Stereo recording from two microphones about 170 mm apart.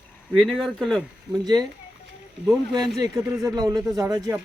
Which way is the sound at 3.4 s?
20° right (ahead or behind).